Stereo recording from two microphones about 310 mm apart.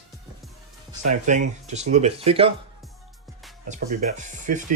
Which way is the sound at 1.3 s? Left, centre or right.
Right.